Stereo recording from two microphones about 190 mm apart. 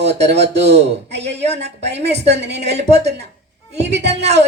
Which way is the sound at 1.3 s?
35° right (ahead or behind).